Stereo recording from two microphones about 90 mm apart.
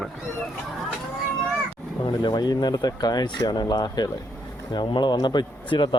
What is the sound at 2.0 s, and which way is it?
Speech, 55° left (ahead or behind).